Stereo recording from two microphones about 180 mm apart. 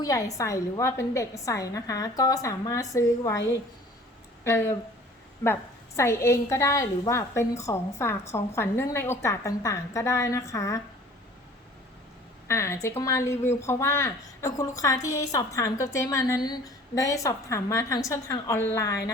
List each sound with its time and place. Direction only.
0.0 s speech: 20° left (ahead or behind)
4.4 s speech: 15° left (ahead or behind)
6.0 s speech: 15° left (ahead or behind)
12.5 s speech: 15° left (ahead or behind)